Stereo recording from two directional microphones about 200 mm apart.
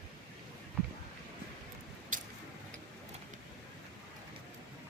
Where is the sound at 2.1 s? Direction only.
40° right (ahead or behind).